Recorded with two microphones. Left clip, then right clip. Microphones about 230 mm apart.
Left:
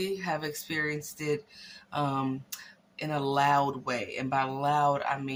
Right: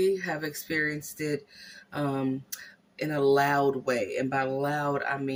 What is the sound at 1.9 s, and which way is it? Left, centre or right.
Speech, centre.